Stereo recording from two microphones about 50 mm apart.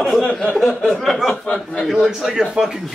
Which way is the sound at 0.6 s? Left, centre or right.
Centre.